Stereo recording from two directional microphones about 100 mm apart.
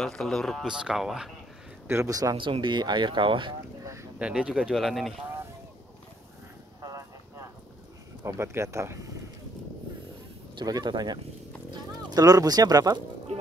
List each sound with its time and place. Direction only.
0.0 s speech: 5° left (ahead or behind)
1.9 s speech: 30° right (ahead or behind)
2.3 s speech: 55° right (ahead or behind)
3.8 s a sound: 30° right (ahead or behind)
4.2 s speech: 10° right (ahead or behind)
6.8 s a sound: 30° right (ahead or behind)
8.2 s speech: 30° right (ahead or behind)
10.5 s speech: 45° right (ahead or behind)